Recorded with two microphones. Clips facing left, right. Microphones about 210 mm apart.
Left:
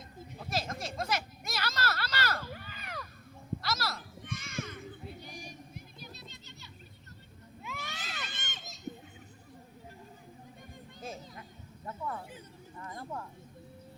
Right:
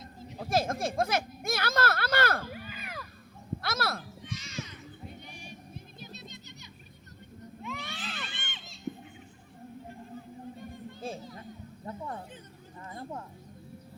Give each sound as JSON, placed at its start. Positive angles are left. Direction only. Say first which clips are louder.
{"t": 0.3, "sound": "speech", "louder": "right 8 dB", "side_deg": -50}
{"t": 2.6, "sound": "a sound", "louder": "right 2 dB", "side_deg": -10}
{"t": 3.6, "sound": "speech", "louder": "right 5 dB", "side_deg": -55}
{"t": 4.2, "sound": "music", "louder": "even", "side_deg": 55}
{"t": 5.0, "sound": "music", "louder": "left 1 dB", "side_deg": 35}
{"t": 6.0, "sound": "bird", "louder": "right 3 dB", "side_deg": -20}
{"t": 7.9, "sound": "crowd", "louder": "right 3 dB", "side_deg": 40}
{"t": 11.0, "sound": "a sound", "louder": "right 4 dB", "side_deg": -30}